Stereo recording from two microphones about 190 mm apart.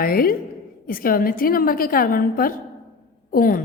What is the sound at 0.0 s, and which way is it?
A woman's voice, 50° left (ahead or behind).